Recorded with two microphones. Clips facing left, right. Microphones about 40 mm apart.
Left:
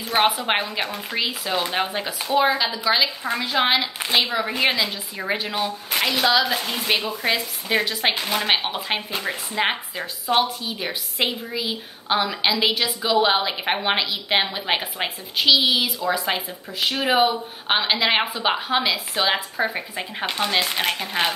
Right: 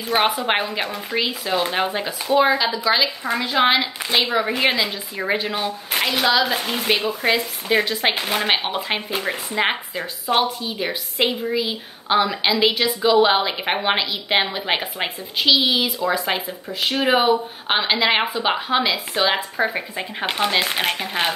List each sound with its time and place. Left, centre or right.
0.1 s a woman's voice: centre
8.2 s a woman's voice: centre
20.2 s speech: centre